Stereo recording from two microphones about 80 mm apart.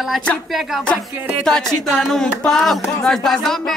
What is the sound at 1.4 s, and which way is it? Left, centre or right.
Speech, centre.